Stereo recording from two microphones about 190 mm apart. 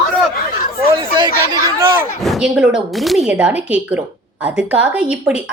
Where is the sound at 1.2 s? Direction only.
25° right (ahead or behind).